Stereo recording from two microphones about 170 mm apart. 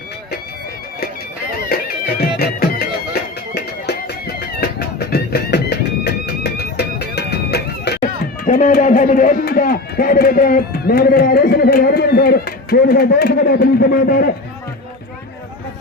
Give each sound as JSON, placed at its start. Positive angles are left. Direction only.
{"t": 1.7, "sound": "music", "side_deg": 65}
{"t": 8.4, "sound": "speech", "side_deg": 50}